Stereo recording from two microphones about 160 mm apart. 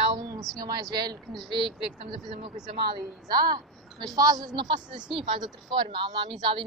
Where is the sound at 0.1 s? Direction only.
30° right (ahead or behind).